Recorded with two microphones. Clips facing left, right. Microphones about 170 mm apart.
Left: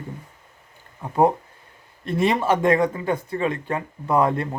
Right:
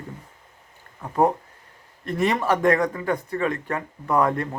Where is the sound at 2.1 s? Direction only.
25° left (ahead or behind).